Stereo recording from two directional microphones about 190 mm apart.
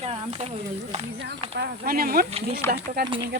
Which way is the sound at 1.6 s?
50° right (ahead or behind).